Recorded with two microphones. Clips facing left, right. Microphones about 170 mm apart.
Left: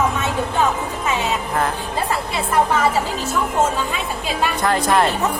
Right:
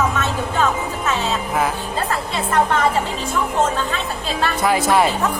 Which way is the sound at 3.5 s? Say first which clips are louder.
Even; 10° left (ahead or behind).